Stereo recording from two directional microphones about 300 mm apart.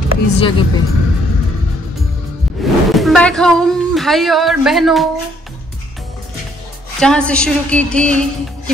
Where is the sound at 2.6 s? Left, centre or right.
Centre.